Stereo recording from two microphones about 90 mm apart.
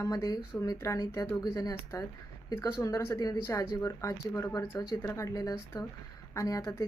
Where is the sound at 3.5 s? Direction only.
35° left (ahead or behind).